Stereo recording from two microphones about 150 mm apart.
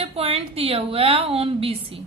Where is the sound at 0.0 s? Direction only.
40° right (ahead or behind).